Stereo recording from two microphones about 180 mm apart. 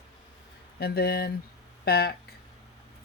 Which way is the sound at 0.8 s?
60° left (ahead or behind).